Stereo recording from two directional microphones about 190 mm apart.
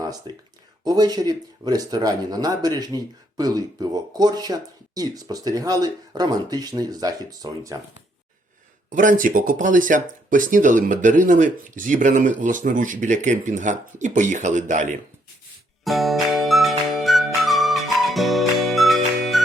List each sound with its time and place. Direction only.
0.0 s speech: 20° right (ahead or behind)
8.9 s speech: 45° right (ahead or behind)
15.8 s music: centre (ahead or behind)